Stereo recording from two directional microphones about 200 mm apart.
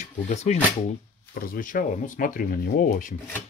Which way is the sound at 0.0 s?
35° left (ahead or behind).